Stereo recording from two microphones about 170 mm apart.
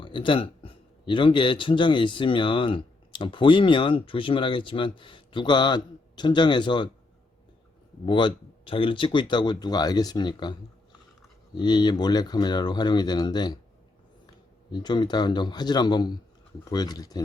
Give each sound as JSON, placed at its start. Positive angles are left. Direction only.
{"t": 0.0, "sound": "speech", "side_deg": 30}
{"t": 8.0, "sound": "speech", "side_deg": 25}
{"t": 14.7, "sound": "speech", "side_deg": 25}